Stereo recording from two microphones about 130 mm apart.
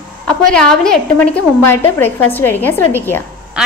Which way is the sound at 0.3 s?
5° left (ahead or behind).